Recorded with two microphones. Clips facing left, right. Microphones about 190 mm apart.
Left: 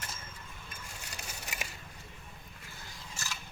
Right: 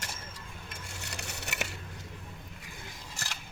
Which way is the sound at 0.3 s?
85° right.